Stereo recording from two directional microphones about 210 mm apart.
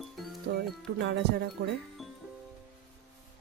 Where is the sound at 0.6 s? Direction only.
55° right (ahead or behind).